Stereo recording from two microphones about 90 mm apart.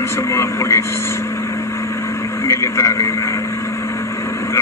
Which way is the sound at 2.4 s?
30° left (ahead or behind).